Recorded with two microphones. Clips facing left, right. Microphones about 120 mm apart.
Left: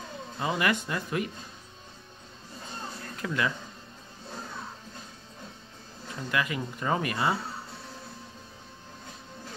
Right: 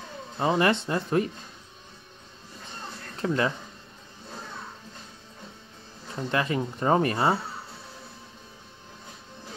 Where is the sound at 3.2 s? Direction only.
35° right (ahead or behind).